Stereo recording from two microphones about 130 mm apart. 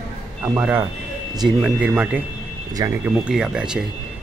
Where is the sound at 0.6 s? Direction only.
15° right (ahead or behind).